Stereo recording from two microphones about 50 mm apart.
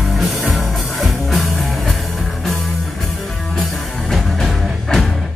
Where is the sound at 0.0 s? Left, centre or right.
Centre.